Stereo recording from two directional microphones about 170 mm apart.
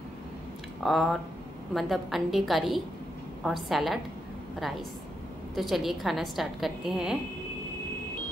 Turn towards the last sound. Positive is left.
turn(degrees=-5)  # may be behind; listen again after turning